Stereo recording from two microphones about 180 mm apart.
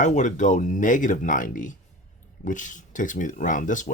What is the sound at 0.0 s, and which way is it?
Speech, 40° left (ahead or behind).